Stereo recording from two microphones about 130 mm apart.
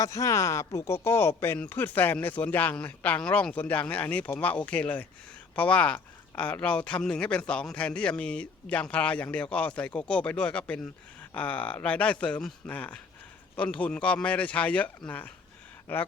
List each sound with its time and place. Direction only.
0.0 s speech: 25° left (ahead or behind)